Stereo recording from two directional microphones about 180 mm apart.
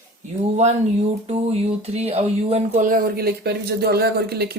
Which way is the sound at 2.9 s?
60° right (ahead or behind).